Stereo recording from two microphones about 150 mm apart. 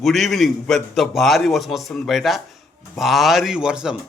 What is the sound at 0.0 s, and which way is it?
A man's voice, centre (ahead or behind).